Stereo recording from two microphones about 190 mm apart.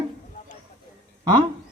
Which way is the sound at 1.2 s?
25° right (ahead or behind).